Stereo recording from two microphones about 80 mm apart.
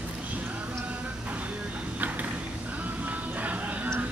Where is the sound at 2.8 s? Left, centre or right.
Centre.